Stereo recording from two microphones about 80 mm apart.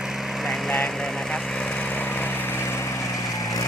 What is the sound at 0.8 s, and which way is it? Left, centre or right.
Lawn mower, centre.